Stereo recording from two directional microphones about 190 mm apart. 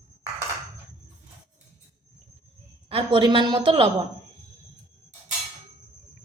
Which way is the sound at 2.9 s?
30° right (ahead or behind).